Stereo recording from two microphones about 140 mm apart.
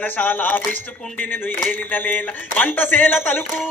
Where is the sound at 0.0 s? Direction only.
15° left (ahead or behind).